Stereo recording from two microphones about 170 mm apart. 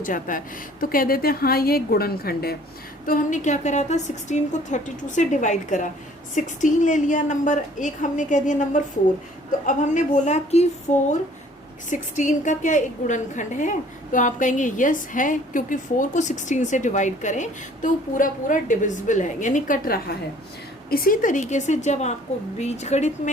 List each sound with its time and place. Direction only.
0.0 s a woman's voice: 55° left (ahead or behind)
3.1 s a woman's voice: 50° left (ahead or behind)